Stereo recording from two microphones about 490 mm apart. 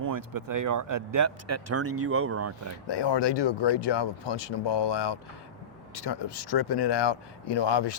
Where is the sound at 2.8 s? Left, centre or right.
Left.